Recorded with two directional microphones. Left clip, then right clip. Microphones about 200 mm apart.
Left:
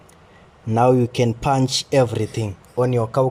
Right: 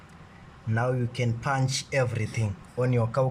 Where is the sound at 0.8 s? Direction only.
30° left (ahead or behind).